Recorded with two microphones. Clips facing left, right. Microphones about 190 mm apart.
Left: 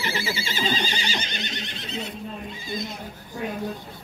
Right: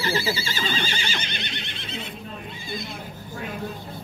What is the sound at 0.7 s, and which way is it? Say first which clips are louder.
Neigh: left 2 dB; 35° left (ahead or behind).